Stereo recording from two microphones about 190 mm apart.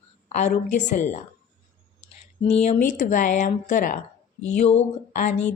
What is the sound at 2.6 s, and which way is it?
Speech, 40° left (ahead or behind).